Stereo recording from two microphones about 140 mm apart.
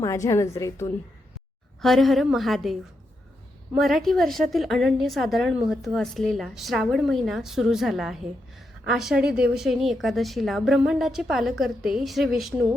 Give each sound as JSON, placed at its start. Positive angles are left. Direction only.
{"t": 0.0, "sound": "a woman's voice", "side_deg": 20}
{"t": 1.8, "sound": "a woman's voice", "side_deg": 0}
{"t": 3.8, "sound": "a woman's voice", "side_deg": 0}